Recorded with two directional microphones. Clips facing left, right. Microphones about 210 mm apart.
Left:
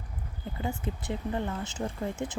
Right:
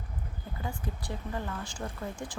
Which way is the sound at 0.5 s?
25° left (ahead or behind).